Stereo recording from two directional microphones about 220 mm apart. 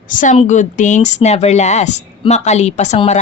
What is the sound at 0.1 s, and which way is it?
Speech, 35° left (ahead or behind).